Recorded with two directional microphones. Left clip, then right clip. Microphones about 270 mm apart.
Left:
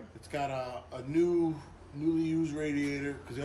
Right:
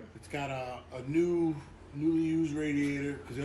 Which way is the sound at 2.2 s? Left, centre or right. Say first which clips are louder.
Right 1 dB; centre.